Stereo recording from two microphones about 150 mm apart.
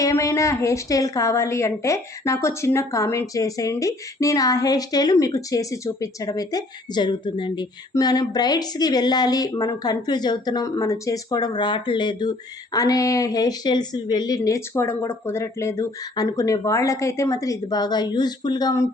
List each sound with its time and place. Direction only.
0.0 s a woman's voice: 20° left (ahead or behind)